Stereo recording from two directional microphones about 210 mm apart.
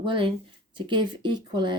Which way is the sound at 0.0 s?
25° right (ahead or behind).